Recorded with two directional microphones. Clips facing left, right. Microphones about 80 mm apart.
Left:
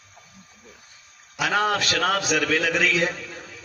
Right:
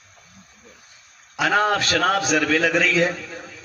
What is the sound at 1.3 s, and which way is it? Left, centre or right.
A man's voice, right.